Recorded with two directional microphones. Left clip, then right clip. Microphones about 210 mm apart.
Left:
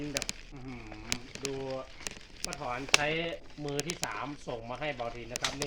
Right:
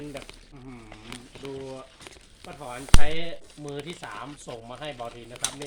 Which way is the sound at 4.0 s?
40° right (ahead or behind).